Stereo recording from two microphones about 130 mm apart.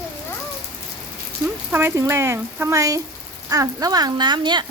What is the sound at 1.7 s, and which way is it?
Speech, 20° right (ahead or behind).